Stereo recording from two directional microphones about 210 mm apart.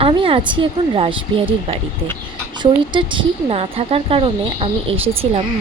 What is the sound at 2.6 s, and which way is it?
A woman's voice, 20° right (ahead or behind).